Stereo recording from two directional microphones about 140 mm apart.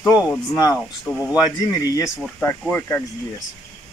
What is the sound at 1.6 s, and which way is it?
Speech, 20° left (ahead or behind).